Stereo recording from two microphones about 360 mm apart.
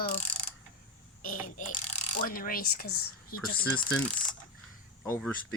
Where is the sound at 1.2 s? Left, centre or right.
Left.